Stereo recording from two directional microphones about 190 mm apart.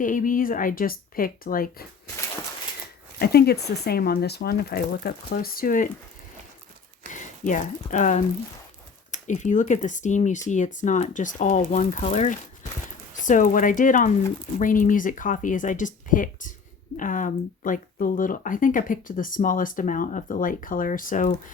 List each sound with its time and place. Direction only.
0.0 s speech: 45° left (ahead or behind)
3.2 s speech: 55° left (ahead or behind)
7.0 s speech: 40° left (ahead or behind)